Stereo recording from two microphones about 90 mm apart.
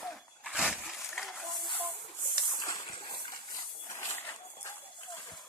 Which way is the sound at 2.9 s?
60° left (ahead or behind).